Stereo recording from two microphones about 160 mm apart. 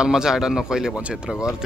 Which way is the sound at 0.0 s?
5° right (ahead or behind).